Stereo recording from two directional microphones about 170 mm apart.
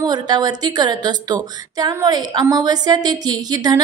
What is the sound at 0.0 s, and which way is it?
A woman's voice, 25° right (ahead or behind).